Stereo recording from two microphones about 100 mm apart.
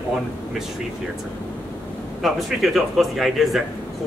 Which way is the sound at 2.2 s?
Centre (ahead or behind).